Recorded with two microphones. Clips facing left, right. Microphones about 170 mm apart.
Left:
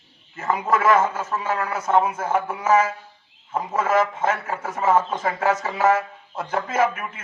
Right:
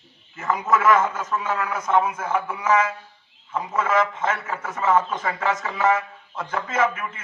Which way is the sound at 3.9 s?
50° left (ahead or behind).